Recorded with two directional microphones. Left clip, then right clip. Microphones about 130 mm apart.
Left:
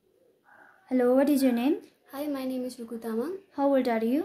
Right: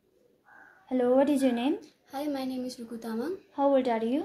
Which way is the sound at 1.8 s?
20° left (ahead or behind).